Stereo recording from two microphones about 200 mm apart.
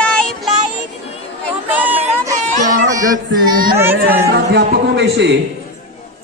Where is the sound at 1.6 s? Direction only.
10° right (ahead or behind).